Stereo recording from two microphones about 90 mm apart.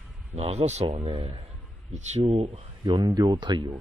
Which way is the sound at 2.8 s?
50° right (ahead or behind).